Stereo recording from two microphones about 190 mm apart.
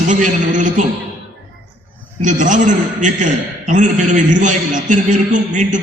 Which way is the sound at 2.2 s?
40° right (ahead or behind).